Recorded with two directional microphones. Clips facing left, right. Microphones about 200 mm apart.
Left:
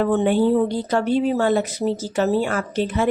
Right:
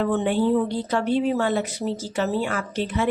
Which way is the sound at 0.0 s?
45° left (ahead or behind).